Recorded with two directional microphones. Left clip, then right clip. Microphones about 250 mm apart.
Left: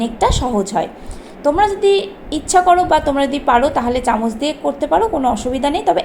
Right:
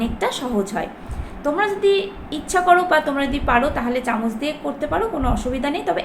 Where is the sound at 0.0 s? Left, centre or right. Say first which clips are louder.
Left 6 dB; centre.